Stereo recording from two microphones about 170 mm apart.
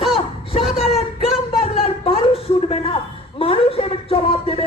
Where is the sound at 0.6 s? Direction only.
5° right (ahead or behind).